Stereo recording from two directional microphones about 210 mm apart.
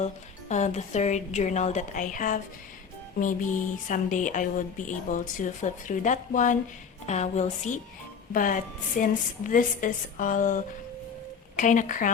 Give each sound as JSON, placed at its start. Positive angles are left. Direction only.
{"t": 0.0, "sound": "speech", "side_deg": 35}